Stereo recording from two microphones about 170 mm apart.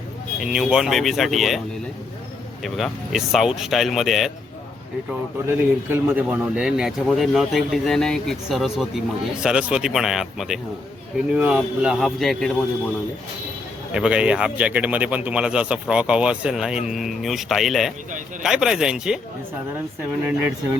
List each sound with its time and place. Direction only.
0.3 s a man's voice: centre (ahead or behind)
2.6 s a man's voice: centre (ahead or behind)
5.5 s a man's voice: 10° right (ahead or behind)
13.9 s a man's voice: 5° right (ahead or behind)